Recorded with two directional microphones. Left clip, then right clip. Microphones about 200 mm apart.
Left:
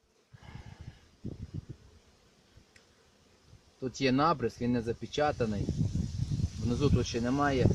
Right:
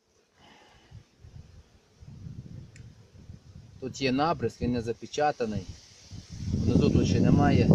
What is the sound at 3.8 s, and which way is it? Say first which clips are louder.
Speech: right 1 dB; 10° right (ahead or behind).